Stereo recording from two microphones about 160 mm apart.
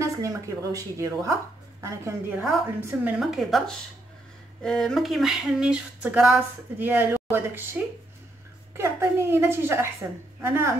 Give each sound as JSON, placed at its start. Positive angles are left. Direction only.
{"t": 0.0, "sound": "a woman's voice", "side_deg": -20}
{"t": 4.6, "sound": "a sound", "side_deg": 5}
{"t": 8.7, "sound": "a woman's voice", "side_deg": -15}